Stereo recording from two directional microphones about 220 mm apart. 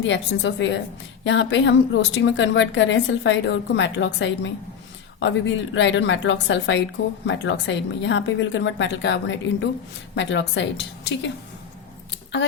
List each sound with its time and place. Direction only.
0.1 s a woman's voice: 55° left (ahead or behind)